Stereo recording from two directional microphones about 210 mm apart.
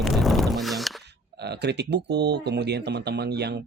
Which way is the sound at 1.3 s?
50° right (ahead or behind).